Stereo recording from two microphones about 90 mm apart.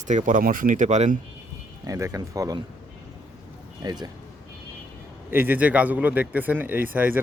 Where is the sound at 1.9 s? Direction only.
35° right (ahead or behind).